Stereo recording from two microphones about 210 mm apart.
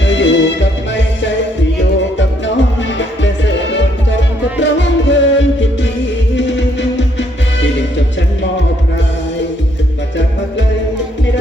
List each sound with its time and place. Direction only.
0.0 s music: 60° left (ahead or behind)
3.0 s music: 60° left (ahead or behind)